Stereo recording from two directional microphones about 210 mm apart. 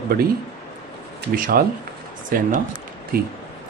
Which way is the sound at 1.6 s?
45° right (ahead or behind).